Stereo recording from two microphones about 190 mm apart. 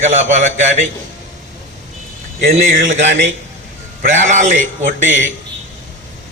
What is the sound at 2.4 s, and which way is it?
A man's voice, 40° right (ahead or behind).